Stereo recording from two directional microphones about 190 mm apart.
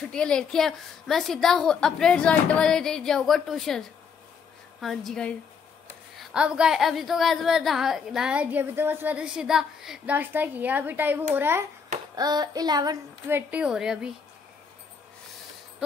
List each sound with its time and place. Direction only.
0.1 s speech: 5° left (ahead or behind); by 11.6 s 10° right (ahead or behind)
12.2 s a sound: 20° right (ahead or behind)
13.5 s speech: 5° right (ahead or behind)